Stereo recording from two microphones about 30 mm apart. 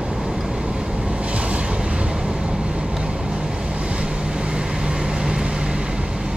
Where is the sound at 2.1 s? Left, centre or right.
Right.